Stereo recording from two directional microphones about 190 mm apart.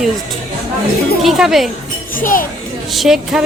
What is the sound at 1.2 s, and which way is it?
Speech, centre (ahead or behind).